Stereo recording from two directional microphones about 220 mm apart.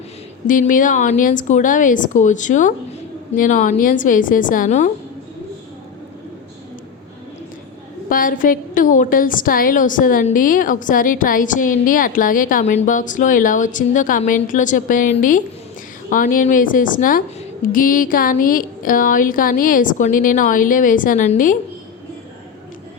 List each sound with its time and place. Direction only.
0.4 s a woman's voice: 35° left (ahead or behind)
8.1 s a woman's voice: 40° left (ahead or behind)